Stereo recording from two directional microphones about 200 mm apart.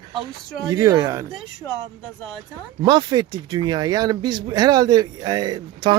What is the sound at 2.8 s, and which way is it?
Speech, 20° right (ahead or behind).